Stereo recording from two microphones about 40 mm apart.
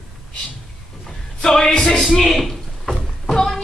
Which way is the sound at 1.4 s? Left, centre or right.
Centre.